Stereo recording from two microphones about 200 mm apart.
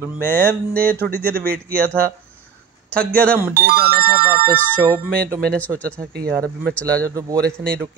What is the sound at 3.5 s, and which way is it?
Music, 50° right (ahead or behind).